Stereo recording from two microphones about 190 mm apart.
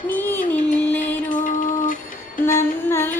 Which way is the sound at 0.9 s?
40° left (ahead or behind).